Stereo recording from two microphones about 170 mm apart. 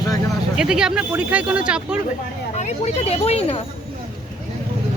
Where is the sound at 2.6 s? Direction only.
40° left (ahead or behind).